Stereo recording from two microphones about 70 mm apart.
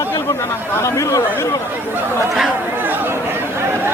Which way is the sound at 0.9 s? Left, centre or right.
Left.